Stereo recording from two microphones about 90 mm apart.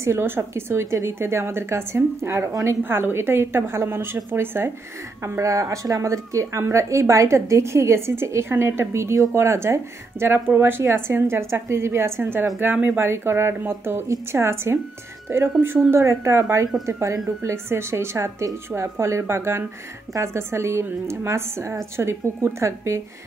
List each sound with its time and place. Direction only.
0.0 s a woman's voice: 30° right (ahead or behind)